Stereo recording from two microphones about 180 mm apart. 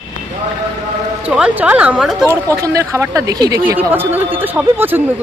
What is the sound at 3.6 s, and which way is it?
Speech, 10° right (ahead or behind).